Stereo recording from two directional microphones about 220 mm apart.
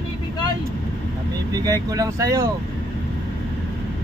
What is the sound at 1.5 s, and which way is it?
Speech, 15° right (ahead or behind).